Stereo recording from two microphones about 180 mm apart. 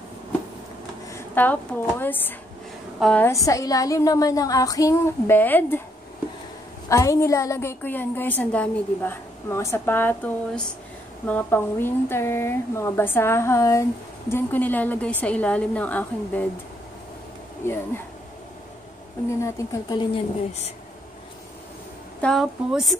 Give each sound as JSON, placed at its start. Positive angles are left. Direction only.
{"t": 1.1, "sound": "a woman's voice", "side_deg": 10}
{"t": 3.3, "sound": "speech", "side_deg": 20}
{"t": 6.9, "sound": "a woman's voice", "side_deg": 15}
{"t": 17.6, "sound": "a woman's voice", "side_deg": 10}
{"t": 19.4, "sound": "speech", "side_deg": 20}
{"t": 22.2, "sound": "a woman's voice", "side_deg": 0}